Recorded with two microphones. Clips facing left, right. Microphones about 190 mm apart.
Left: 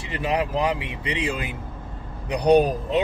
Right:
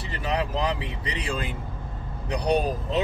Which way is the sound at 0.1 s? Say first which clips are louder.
Left 4 dB; 15° left (ahead or behind).